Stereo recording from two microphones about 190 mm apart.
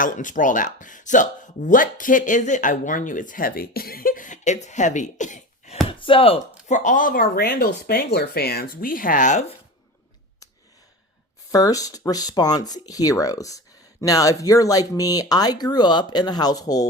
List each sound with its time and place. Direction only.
0.0 s speech: 45° left (ahead or behind)
5.9 s speech: 30° left (ahead or behind)
11.5 s speech: 20° left (ahead or behind)